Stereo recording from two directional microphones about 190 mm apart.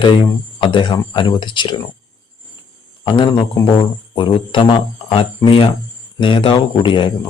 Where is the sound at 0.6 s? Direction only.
25° left (ahead or behind).